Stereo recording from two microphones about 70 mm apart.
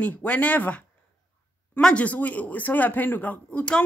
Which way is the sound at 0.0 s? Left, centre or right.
Left.